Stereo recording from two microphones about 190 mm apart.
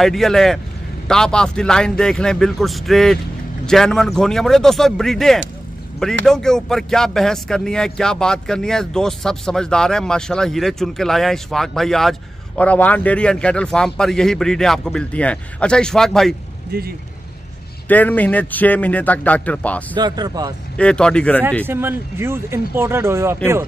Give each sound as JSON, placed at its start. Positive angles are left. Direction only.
{"t": 0.0, "sound": "speech", "side_deg": 0}
{"t": 16.7, "sound": "speech", "side_deg": -55}
{"t": 17.8, "sound": "speech", "side_deg": 10}
{"t": 20.0, "sound": "speech", "side_deg": -20}
{"t": 20.7, "sound": "speech", "side_deg": 5}
{"t": 21.6, "sound": "speech", "side_deg": -10}